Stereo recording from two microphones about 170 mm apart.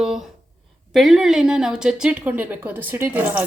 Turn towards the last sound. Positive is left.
turn(degrees=-10)  # may be behind; listen again after turning